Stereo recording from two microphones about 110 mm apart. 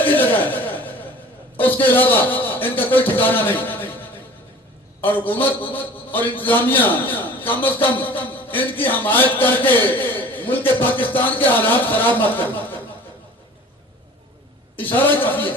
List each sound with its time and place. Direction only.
0.0 s a sound: 15° left (ahead or behind)
1.5 s a man's voice: 15° left (ahead or behind)
4.9 s a man's voice: 15° left (ahead or behind)
14.9 s a man's voice: 15° left (ahead or behind)